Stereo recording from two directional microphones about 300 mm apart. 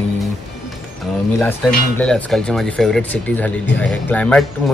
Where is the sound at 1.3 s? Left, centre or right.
Centre.